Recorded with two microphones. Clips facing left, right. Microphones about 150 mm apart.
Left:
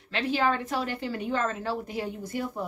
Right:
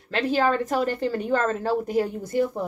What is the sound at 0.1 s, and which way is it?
Speech, 45° right (ahead or behind).